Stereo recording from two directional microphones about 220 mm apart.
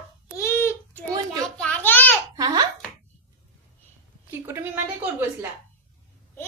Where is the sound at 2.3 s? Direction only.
20° right (ahead or behind).